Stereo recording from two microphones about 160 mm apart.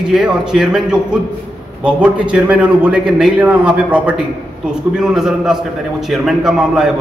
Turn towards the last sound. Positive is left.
turn(degrees=0)  # may be behind; listen again after turning